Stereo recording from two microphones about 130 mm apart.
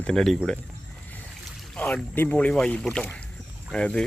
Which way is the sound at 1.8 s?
10° left (ahead or behind).